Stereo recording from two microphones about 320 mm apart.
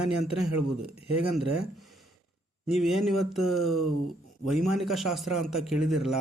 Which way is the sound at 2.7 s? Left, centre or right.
Centre.